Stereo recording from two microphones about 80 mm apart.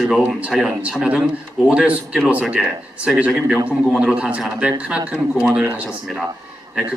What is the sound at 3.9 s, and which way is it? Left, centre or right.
A man's voice, centre.